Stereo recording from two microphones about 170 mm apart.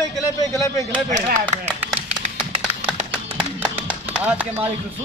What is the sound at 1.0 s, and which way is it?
Speech, 45° right (ahead or behind).